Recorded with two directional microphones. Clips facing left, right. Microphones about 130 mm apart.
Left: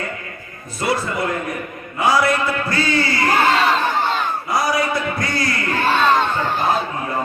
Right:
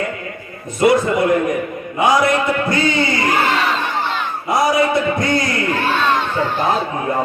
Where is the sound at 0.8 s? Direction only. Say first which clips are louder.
Right 8 dB; 20° right (ahead or behind).